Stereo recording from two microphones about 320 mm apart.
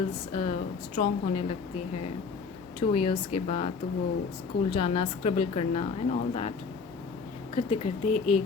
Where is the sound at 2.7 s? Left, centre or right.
Centre.